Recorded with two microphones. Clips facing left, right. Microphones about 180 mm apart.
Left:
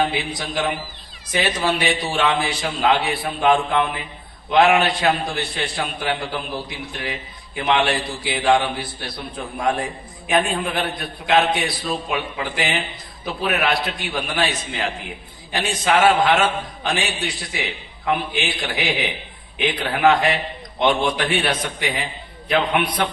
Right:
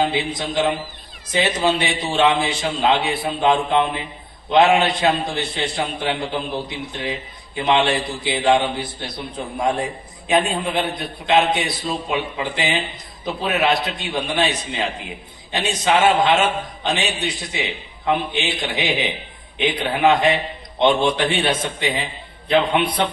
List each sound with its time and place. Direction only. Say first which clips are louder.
0.0 s a man's voice: right 2 dB; 20° right (ahead or behind)